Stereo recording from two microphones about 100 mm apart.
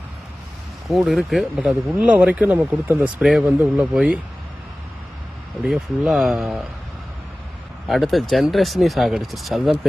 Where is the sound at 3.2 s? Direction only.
Centre (ahead or behind).